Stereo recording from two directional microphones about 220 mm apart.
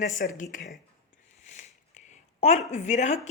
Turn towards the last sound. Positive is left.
turn(degrees=30)  # may be behind; listen again after turning